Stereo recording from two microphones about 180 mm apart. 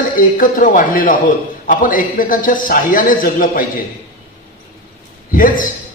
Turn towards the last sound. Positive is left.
turn(degrees=50)  # may be behind; listen again after turning